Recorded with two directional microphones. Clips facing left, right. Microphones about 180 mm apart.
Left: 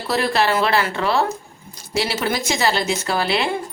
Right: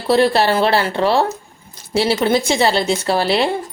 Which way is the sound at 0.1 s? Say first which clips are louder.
Right 6 dB; 30° right (ahead or behind).